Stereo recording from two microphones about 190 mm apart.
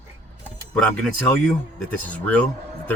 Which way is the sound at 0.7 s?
5° left (ahead or behind).